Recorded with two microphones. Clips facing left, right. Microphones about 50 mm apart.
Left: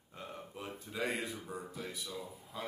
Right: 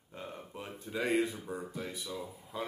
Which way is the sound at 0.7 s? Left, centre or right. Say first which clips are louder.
Right 4 dB; centre.